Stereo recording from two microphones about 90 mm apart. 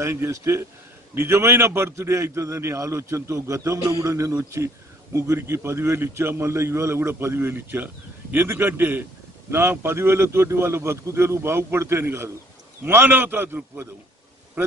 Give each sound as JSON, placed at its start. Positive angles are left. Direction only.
{"t": 0.0, "sound": "a man's voice", "side_deg": -30}